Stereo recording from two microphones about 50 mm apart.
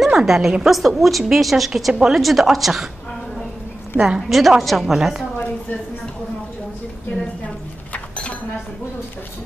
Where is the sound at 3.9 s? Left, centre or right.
Centre.